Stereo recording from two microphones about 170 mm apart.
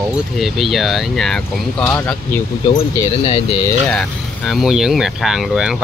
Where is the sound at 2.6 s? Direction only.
25° left (ahead or behind).